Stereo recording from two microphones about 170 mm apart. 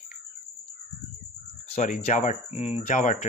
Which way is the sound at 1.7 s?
45° left (ahead or behind).